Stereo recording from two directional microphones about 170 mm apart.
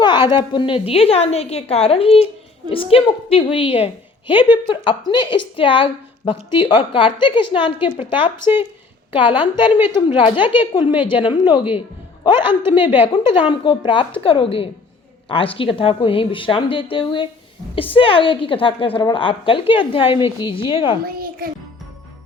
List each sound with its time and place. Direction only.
0.0 s a woman's voice: 25° left (ahead or behind)
9.4 s a woman's voice: 30° left (ahead or behind)
12.8 s a woman's voice: 10° right (ahead or behind)
13.5 s a woman's voice: 30° left (ahead or behind)
21.1 s music: 60° right (ahead or behind)